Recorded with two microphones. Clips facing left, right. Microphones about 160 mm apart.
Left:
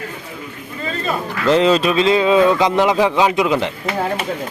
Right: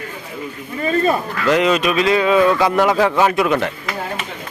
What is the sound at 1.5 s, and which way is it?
A man's voice, 30° left (ahead or behind).